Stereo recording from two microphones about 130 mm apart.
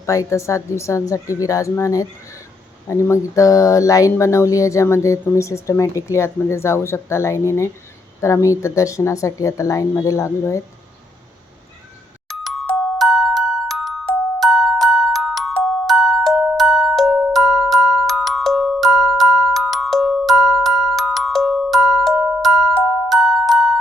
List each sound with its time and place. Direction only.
0.0 s speech: 25° left (ahead or behind)
12.3 s music: centre (ahead or behind)
14.3 s glockenspiel: centre (ahead or behind)